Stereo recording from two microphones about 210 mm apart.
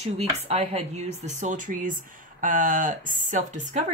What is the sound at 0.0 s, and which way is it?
Speech, 30° right (ahead or behind).